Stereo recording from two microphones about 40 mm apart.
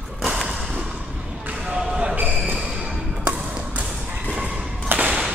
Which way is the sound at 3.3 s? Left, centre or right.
Right.